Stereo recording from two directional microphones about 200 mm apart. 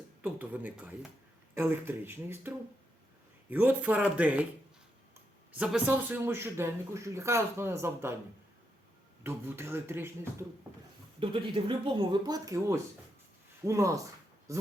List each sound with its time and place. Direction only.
0.2 s speech: 10° right (ahead or behind)
5.5 s speech: 5° right (ahead or behind)
9.2 s speech: 10° right (ahead or behind)
11.2 s speech: 25° right (ahead or behind)
14.5 s a sound: 15° right (ahead or behind)